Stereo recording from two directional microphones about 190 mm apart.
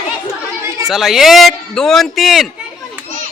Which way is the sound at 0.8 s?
Centre (ahead or behind).